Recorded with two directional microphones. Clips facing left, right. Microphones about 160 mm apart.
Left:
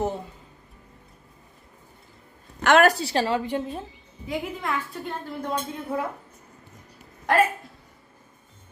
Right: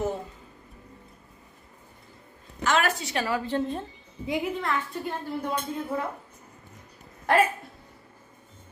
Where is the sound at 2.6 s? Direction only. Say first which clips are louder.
Left 7 dB; 65° left (ahead or behind).